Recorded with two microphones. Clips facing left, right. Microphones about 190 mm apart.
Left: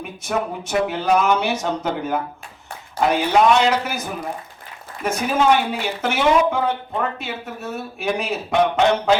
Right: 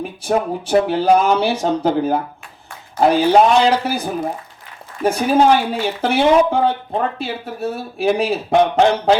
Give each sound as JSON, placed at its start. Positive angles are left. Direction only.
{"t": 0.3, "sound": "speech", "side_deg": -30}